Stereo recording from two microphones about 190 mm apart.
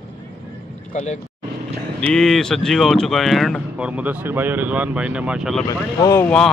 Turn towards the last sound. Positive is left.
turn(degrees=10)  # may be behind; listen again after turning